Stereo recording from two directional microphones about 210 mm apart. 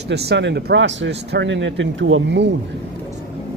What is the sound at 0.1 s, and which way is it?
Speech, 50° right (ahead or behind).